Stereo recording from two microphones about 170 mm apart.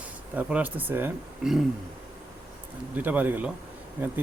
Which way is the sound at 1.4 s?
5° right (ahead or behind).